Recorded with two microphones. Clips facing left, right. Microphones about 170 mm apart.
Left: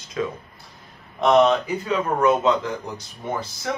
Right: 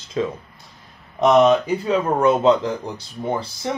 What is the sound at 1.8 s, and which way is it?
Speech, 30° right (ahead or behind).